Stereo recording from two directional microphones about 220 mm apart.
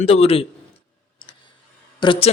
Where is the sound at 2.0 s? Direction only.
25° left (ahead or behind).